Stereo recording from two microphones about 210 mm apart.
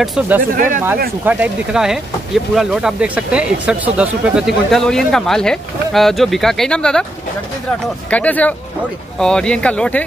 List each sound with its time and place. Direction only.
0.0 s speech: centre (ahead or behind)
0.6 s speech: 40° right (ahead or behind)
1.2 s speech: 5° right (ahead or behind)
8.1 s speech: 5° left (ahead or behind)